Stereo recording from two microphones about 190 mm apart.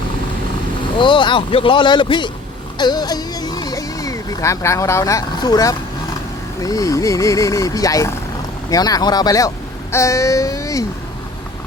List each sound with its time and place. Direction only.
0.9 s speech: 25° left (ahead or behind)